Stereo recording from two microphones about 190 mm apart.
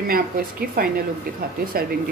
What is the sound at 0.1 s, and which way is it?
Speech, 50° right (ahead or behind).